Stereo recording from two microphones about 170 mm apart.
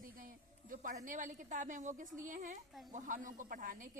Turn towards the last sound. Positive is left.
turn(degrees=-50)  # may be behind; listen again after turning